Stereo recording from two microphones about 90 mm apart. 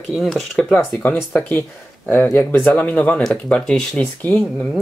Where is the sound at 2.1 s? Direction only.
20° left (ahead or behind).